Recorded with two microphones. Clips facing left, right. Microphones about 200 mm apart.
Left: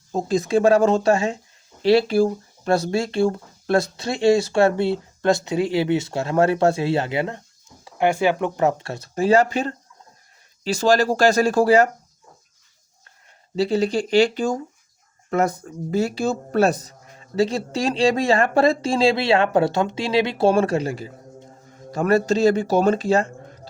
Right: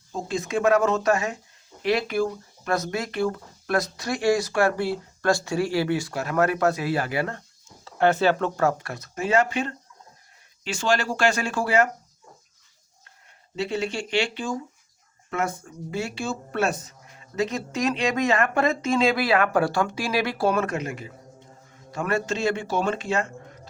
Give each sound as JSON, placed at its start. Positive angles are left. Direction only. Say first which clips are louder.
{"t": 0.1, "sound": "speech", "louder": "left 7 dB", "side_deg": 35}
{"t": 13.6, "sound": "speech", "louder": "left 7 dB", "side_deg": 35}